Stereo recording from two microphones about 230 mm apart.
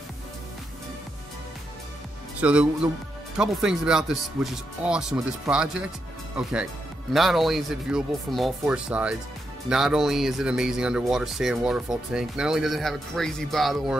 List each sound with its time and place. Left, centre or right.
2.4 s speech: centre